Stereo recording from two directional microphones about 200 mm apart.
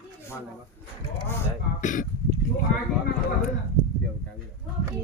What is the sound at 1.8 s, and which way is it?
Throat clearing, 40° left (ahead or behind).